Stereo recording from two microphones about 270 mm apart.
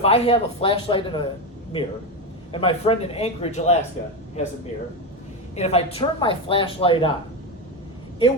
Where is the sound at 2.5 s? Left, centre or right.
Centre.